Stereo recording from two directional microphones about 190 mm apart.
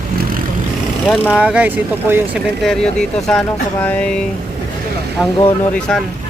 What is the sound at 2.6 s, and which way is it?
Speech, 5° left (ahead or behind).